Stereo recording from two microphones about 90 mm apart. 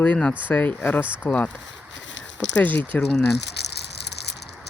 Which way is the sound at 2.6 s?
20° left (ahead or behind).